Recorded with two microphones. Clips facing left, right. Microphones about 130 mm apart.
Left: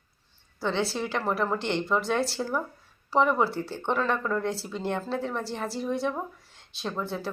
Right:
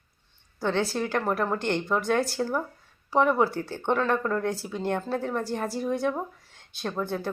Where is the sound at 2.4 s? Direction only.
Centre (ahead or behind).